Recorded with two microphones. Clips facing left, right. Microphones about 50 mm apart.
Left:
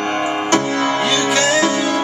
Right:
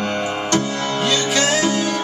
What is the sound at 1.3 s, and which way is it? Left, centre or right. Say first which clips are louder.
Music: left 3 dB; centre.